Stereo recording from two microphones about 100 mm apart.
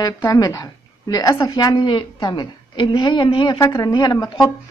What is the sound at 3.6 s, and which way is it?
Speech, 40° left (ahead or behind).